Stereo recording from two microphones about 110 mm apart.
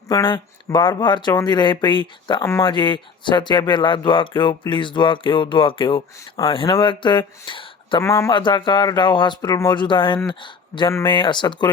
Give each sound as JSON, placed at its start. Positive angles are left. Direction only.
{"t": 0.1, "sound": "speech", "side_deg": 45}
{"t": 2.4, "sound": "speech", "side_deg": 25}
{"t": 2.6, "sound": "speech", "side_deg": 45}
{"t": 8.0, "sound": "speech", "side_deg": 25}
{"t": 8.3, "sound": "speech", "side_deg": 45}